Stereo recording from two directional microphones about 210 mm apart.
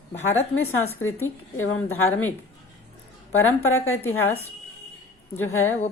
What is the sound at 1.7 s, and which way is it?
Speech, 10° left (ahead or behind).